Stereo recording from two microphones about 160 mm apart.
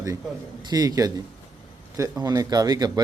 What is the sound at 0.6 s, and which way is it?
A man's voice, 25° right (ahead or behind).